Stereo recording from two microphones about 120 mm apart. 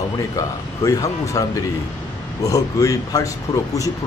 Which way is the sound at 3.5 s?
55° left (ahead or behind).